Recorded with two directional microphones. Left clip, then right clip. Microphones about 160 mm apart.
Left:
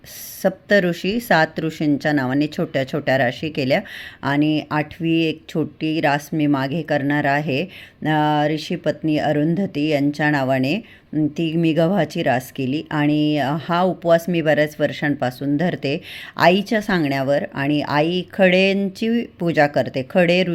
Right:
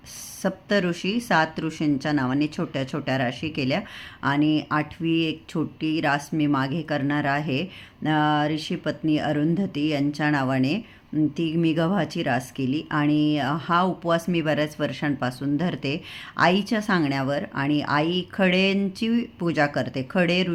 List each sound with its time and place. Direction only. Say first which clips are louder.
0.4 s speech: left 7 dB; 25° left (ahead or behind)